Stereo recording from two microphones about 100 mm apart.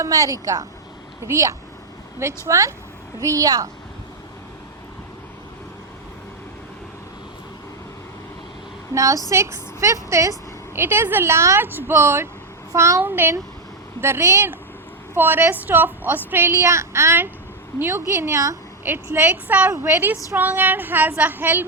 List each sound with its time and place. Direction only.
0.0 s a woman's voice: 35° right (ahead or behind)
9.0 s a woman's voice: 35° right (ahead or behind)
15.1 s a woman's voice: 20° right (ahead or behind)